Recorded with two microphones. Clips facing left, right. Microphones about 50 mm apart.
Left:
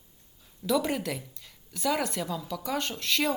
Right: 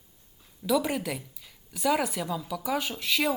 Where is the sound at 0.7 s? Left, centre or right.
Centre.